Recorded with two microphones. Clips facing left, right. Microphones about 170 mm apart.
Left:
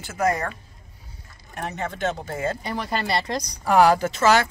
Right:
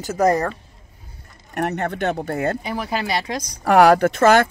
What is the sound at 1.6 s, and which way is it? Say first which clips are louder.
A woman's voice: right 6 dB; 65° right (ahead or behind).